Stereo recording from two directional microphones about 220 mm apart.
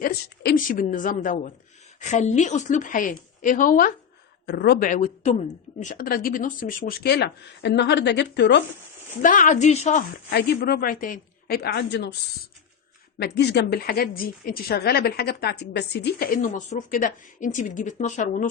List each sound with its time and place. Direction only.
0.0 s a woman's voice: 40° left (ahead or behind)
9.2 s a woman's voice: 35° left (ahead or behind)
10.2 s speech: 45° left (ahead or behind)
13.1 s speech: 50° left (ahead or behind); by 18.4 s 35° left (ahead or behind)